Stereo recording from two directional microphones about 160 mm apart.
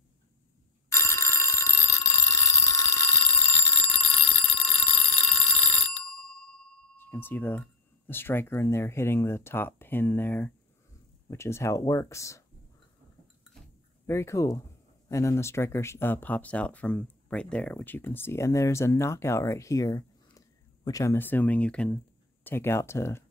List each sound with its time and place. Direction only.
0.8 s telephone bell ringing: 15° left (ahead or behind)
4.6 s a sound: 10° left (ahead or behind)
7.0 s speech: 10° left (ahead or behind)
14.0 s speech: 15° left (ahead or behind)